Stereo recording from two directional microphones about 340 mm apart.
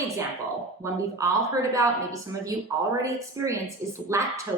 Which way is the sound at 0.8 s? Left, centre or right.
Centre.